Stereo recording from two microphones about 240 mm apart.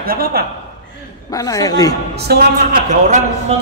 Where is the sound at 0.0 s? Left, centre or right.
Right.